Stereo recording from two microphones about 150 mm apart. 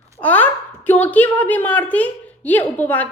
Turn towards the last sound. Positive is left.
turn(degrees=10)  # may be behind; listen again after turning